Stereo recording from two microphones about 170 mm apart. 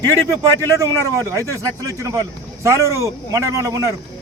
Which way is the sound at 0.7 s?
20° right (ahead or behind).